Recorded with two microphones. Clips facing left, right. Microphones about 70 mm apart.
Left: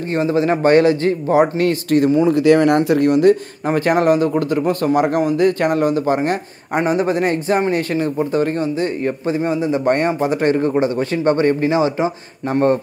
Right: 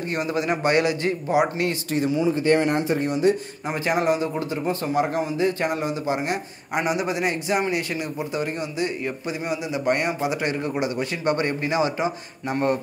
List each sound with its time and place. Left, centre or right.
0.1 s a man's voice: left
2.3 s a man's voice: left